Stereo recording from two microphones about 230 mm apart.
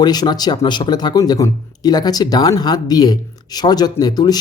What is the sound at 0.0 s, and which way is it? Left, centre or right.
Speech, centre.